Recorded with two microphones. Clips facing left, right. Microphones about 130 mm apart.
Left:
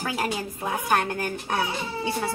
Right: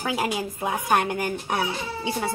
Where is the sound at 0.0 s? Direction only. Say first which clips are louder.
Right 2 dB; 15° right (ahead or behind).